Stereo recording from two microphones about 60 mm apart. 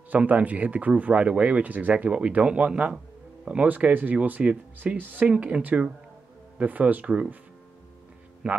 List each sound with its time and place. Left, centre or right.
0.1 s speech: right
4.9 s speech: right
5.2 s speech: centre
8.4 s speech: centre